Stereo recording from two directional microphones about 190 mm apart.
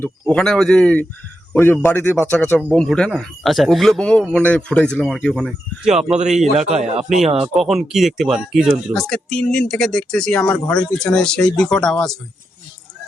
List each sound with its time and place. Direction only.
0.0 s speech: 5° left (ahead or behind)
6.6 s speech: 35° right (ahead or behind)
7.4 s speech: centre (ahead or behind)